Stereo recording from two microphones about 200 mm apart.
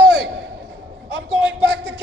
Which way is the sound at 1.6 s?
60° right (ahead or behind).